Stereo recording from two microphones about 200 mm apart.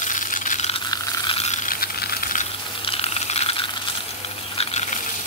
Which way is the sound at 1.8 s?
50° left (ahead or behind).